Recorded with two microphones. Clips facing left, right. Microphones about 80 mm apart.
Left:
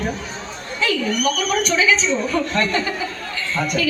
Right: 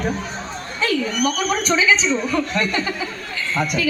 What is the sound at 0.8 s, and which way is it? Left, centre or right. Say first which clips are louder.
Speech: even; right.